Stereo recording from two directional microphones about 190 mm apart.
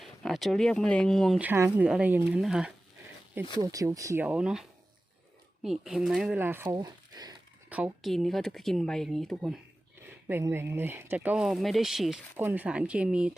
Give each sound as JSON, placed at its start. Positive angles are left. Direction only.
{"t": 0.0, "sound": "speech", "side_deg": 0}
{"t": 1.4, "sound": "speech", "side_deg": -10}
{"t": 3.6, "sound": "speech", "side_deg": -20}
{"t": 5.6, "sound": "speech", "side_deg": 0}
{"t": 6.7, "sound": "a sound", "side_deg": -20}
{"t": 7.7, "sound": "speech", "side_deg": -5}
{"t": 10.2, "sound": "speech", "side_deg": -10}